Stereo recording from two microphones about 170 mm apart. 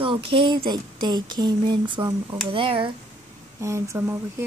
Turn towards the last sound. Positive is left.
turn(degrees=-15)  # may be behind; listen again after turning